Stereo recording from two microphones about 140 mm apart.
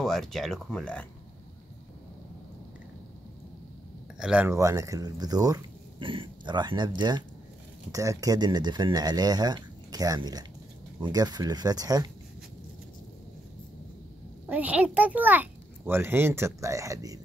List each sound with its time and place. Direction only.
0.0 s speech: centre (ahead or behind)
4.2 s a child's voice: 5° right (ahead or behind)
4.5 s speech: 20° right (ahead or behind)
6.0 s speech: 35° right (ahead or behind)
14.5 s a child's voice: 10° right (ahead or behind)